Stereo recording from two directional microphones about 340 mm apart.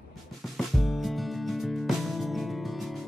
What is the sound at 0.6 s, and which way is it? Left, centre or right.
Music, centre.